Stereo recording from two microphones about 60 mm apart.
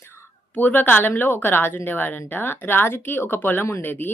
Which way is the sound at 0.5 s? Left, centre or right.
Left.